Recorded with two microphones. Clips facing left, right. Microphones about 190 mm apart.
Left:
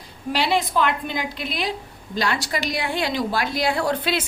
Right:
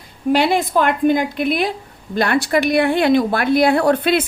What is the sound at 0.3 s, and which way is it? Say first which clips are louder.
A woman's voice: right 4 dB; 50° right (ahead or behind).